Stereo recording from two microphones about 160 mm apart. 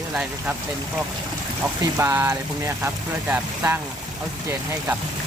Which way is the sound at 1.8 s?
15° right (ahead or behind).